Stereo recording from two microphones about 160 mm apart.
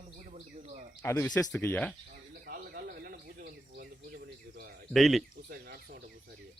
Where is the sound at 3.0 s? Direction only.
70° right (ahead or behind).